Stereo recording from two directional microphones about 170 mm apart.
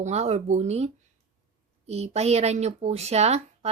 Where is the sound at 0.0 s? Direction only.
40° right (ahead or behind).